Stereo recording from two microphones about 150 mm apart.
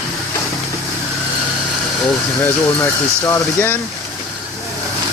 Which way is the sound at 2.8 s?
20° left (ahead or behind).